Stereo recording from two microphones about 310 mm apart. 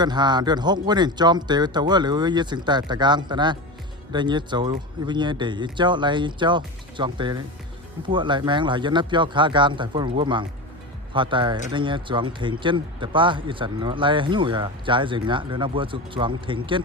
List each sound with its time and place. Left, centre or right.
0.0 s speech: centre